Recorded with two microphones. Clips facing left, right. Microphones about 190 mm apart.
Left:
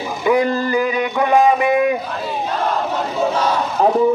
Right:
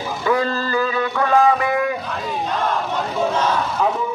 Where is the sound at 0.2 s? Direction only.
15° left (ahead or behind).